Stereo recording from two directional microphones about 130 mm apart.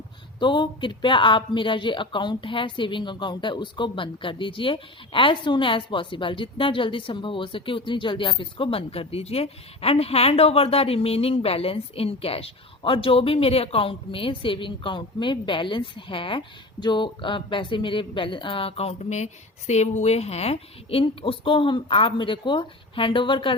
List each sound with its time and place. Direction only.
0.3 s speech: 35° left (ahead or behind)